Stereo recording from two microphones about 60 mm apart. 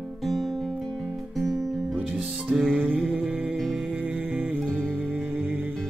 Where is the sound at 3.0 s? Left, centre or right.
Centre.